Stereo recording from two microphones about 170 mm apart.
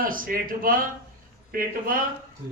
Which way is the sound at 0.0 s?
55° right (ahead or behind).